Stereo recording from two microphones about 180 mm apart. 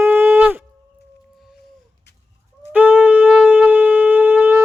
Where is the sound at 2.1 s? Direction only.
70° left (ahead or behind).